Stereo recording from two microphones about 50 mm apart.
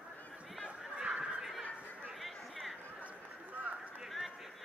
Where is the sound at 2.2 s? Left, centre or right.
Centre.